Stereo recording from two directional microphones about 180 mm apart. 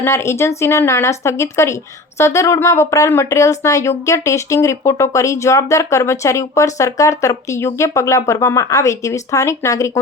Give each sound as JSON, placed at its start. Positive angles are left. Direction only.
{"t": 0.0, "sound": "speech", "side_deg": 15}